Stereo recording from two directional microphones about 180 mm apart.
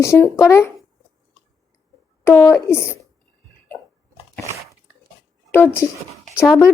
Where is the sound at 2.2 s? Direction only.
10° left (ahead or behind).